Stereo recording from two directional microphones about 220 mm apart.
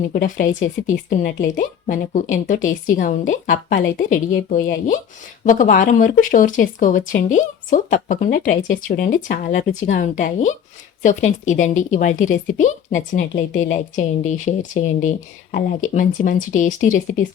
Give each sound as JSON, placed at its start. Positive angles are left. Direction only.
{"t": 0.1, "sound": "speech", "side_deg": 35}